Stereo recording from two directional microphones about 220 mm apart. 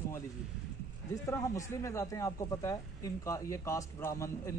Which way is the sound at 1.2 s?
15° left (ahead or behind).